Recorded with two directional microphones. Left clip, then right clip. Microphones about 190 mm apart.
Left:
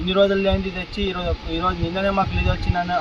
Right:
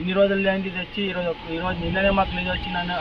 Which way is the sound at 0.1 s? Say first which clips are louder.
Left 2 dB; 15° left (ahead or behind).